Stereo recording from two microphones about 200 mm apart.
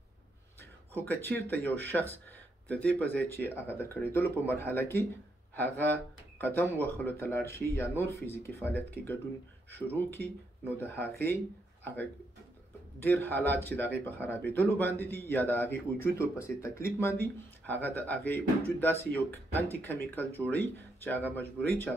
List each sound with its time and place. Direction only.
0.6 s speech: 10° left (ahead or behind)
13.0 s speech: 10° left (ahead or behind)